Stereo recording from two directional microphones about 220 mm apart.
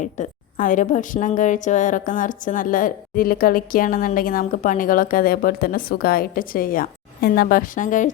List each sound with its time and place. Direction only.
0.0 s a woman's voice: 35° left (ahead or behind)